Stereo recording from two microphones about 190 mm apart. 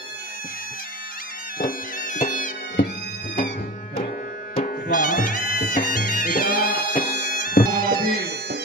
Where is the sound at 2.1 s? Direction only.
45° left (ahead or behind).